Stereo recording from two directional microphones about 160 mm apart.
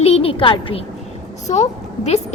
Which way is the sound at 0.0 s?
40° left (ahead or behind).